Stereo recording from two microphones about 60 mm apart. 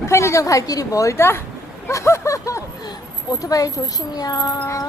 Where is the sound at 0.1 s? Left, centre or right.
Left.